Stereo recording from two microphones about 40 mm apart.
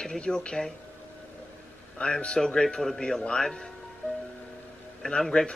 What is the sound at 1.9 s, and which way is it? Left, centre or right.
Speech, left.